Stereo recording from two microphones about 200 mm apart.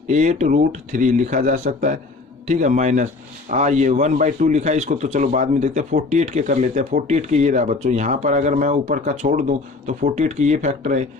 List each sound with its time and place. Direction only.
0.1 s a man's voice: 35° right (ahead or behind)